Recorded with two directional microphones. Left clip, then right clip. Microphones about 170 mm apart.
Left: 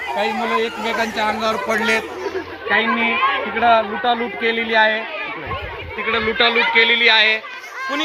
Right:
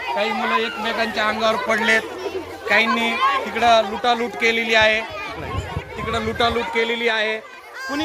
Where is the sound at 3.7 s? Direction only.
45° right (ahead or behind).